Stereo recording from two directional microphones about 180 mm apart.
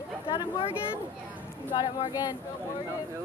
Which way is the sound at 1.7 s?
25° left (ahead or behind).